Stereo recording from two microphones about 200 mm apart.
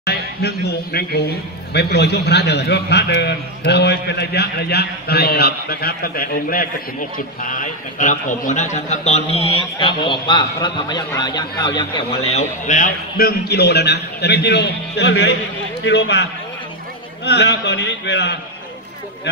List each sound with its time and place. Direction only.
0.0 s a man's voice: 55° left (ahead or behind)